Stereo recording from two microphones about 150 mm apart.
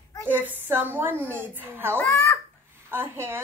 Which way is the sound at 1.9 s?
15° left (ahead or behind).